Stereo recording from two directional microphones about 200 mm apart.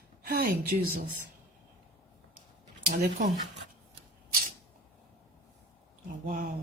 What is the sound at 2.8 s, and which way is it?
Speech, 45° right (ahead or behind).